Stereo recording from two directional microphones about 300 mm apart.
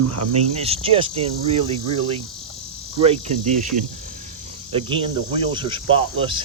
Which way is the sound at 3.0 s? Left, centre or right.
Right.